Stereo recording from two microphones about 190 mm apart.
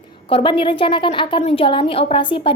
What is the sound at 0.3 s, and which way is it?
A woman's voice, 30° left (ahead or behind).